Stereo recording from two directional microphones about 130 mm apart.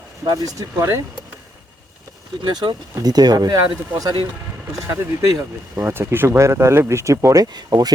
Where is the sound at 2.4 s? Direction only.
35° right (ahead or behind).